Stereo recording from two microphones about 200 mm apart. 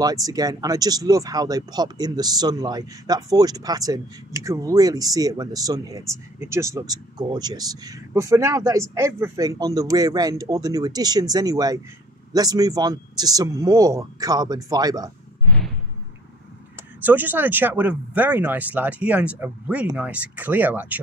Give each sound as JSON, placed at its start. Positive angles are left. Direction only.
{"t": 0.0, "sound": "speech", "side_deg": -20}
{"t": 17.0, "sound": "speech", "side_deg": -10}